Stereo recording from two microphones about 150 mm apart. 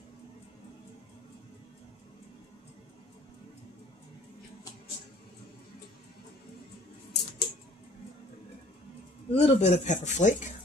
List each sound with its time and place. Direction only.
7.1 s scissors: 90° left
9.3 s speech: 45° left (ahead or behind)